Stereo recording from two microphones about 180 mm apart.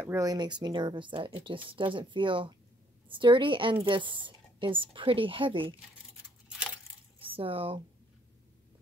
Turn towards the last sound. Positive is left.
turn(degrees=-30)  # may be behind; listen again after turning